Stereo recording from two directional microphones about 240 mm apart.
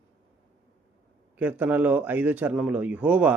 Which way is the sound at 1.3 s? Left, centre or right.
Centre.